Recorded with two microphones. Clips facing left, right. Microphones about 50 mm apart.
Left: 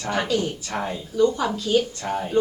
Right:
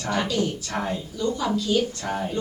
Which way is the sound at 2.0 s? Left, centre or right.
Centre.